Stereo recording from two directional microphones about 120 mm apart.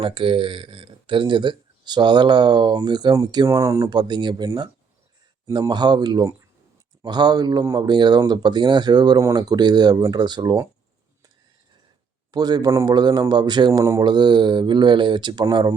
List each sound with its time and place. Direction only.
0.0 s speech: 45° right (ahead or behind); by 3.9 s 25° right (ahead or behind)
3.9 s speech: 35° right (ahead or behind)
12.3 s speech: 35° right (ahead or behind)